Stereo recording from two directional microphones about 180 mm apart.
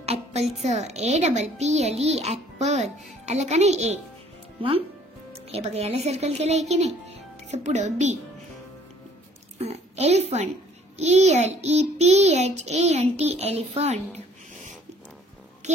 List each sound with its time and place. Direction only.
0.0 s a child's voice: 35° right (ahead or behind)
5.3 s speech: 35° right (ahead or behind)
9.6 s a woman's voice: 35° right (ahead or behind)
15.6 s a sound: 40° right (ahead or behind)